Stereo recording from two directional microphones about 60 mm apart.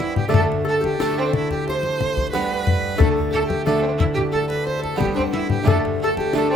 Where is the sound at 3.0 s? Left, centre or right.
Centre.